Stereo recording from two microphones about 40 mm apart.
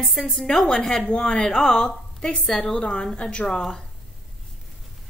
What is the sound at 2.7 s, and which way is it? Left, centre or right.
Speech, left.